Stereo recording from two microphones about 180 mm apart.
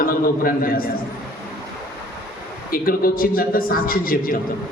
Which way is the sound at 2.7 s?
55° left (ahead or behind).